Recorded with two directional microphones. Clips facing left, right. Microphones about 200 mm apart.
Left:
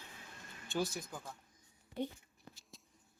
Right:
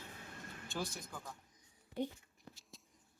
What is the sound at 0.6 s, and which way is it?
Speech, 5° left (ahead or behind).